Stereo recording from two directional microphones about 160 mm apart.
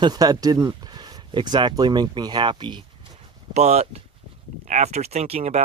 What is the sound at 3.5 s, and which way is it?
Speech, 45° right (ahead or behind).